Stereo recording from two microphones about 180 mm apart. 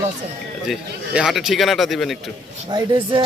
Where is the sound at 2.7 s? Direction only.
25° right (ahead or behind).